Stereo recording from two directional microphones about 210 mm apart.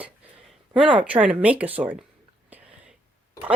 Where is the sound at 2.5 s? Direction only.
10° right (ahead or behind).